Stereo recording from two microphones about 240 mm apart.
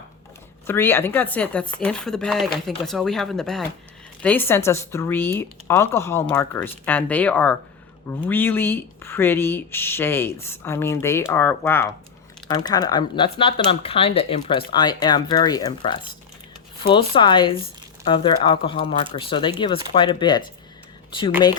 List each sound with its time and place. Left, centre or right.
0.7 s speech: centre